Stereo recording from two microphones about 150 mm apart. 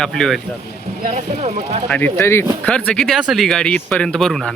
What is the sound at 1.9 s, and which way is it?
Speech, 10° left (ahead or behind).